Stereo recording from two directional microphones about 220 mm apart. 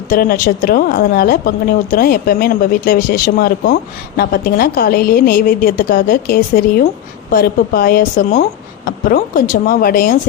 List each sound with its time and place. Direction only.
0.1 s a woman's voice: 40° left (ahead or behind)